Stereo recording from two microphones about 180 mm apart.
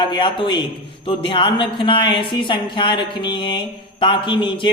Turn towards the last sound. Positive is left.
turn(degrees=25)  # may be behind; listen again after turning